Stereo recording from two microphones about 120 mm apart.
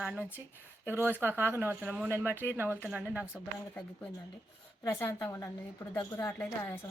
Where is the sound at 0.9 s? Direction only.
20° right (ahead or behind).